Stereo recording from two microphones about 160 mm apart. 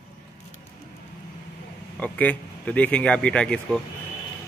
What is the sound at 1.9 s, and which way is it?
Speech, 10° left (ahead or behind).